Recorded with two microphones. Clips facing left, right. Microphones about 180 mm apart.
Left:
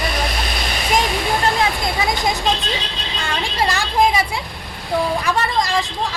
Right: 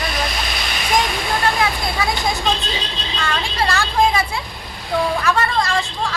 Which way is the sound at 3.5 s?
15° left (ahead or behind).